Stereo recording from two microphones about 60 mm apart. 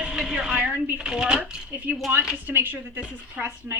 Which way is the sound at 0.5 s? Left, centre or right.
Right.